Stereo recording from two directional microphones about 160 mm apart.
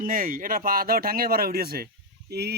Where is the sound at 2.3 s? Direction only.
90° right.